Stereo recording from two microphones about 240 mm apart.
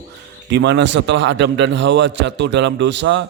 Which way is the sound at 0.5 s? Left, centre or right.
Right.